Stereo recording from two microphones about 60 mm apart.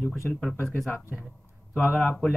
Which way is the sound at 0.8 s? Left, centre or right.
Left.